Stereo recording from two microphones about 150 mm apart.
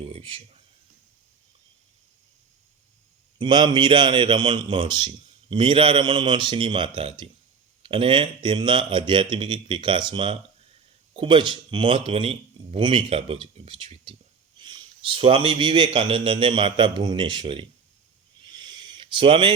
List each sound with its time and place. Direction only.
0.0 s speech: 40° right (ahead or behind)
3.3 s a man's voice: 30° right (ahead or behind)
18.4 s a sound: 30° right (ahead or behind)